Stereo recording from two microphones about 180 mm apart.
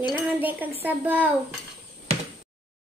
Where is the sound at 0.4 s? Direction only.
10° right (ahead or behind).